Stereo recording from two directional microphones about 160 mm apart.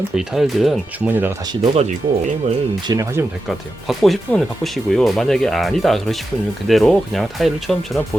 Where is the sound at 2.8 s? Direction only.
20° right (ahead or behind).